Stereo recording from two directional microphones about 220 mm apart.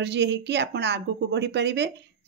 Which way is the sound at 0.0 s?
50° right (ahead or behind).